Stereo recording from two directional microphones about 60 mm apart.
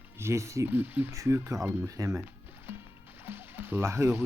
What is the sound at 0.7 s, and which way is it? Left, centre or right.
Speech, right.